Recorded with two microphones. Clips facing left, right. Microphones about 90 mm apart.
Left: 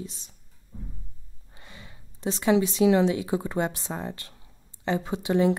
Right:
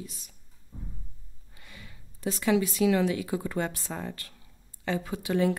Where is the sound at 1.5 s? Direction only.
25° left (ahead or behind).